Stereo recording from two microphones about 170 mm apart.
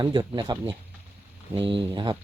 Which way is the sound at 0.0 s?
30° right (ahead or behind).